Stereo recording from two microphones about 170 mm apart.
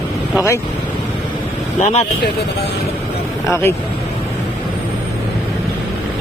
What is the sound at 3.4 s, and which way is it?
Speech, 15° left (ahead or behind).